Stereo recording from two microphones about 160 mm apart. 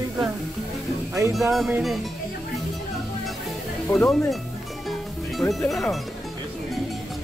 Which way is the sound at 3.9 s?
5° left (ahead or behind).